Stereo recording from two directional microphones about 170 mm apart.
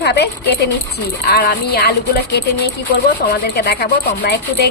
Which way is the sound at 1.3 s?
70° left (ahead or behind).